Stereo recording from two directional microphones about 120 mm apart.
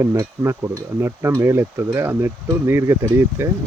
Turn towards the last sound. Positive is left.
turn(degrees=-20)  # may be behind; listen again after turning